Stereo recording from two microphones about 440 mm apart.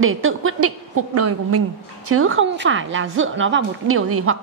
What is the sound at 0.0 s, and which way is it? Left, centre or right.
A woman's voice, right.